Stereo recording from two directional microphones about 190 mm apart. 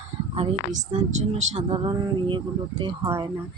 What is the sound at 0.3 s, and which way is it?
Speech, 35° right (ahead or behind).